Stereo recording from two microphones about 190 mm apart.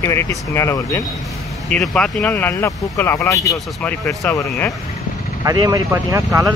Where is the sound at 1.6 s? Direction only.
5° left (ahead or behind).